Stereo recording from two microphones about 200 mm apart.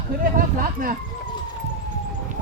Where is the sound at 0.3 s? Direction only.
45° right (ahead or behind).